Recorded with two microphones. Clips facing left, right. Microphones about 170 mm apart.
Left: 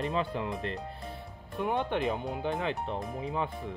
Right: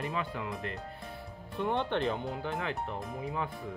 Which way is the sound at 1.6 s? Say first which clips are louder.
Left 1 dB; 5° left (ahead or behind).